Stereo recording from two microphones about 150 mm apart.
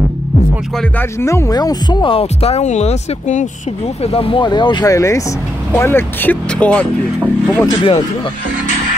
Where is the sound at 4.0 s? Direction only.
40° left (ahead or behind); by 6.8 s 10° left (ahead or behind).